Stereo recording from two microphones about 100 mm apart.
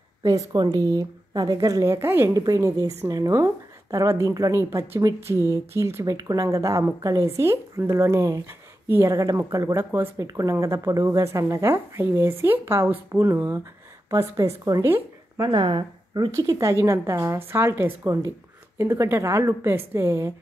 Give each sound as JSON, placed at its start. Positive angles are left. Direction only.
{"t": 0.2, "sound": "a woman's voice", "side_deg": -35}
{"t": 9.1, "sound": "a woman's voice", "side_deg": -35}
{"t": 15.5, "sound": "speech", "side_deg": -50}
{"t": 16.3, "sound": "a woman's voice", "side_deg": -35}